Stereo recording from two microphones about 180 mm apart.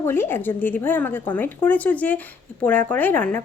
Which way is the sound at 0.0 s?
15° left (ahead or behind).